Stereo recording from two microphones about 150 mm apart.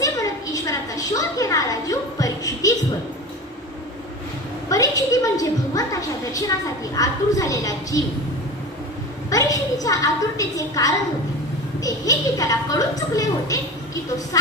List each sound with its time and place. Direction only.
0.0 s a sound: 25° left (ahead or behind)
4.7 s a woman's voice: 25° left (ahead or behind)
9.3 s a woman's voice: 25° left (ahead or behind)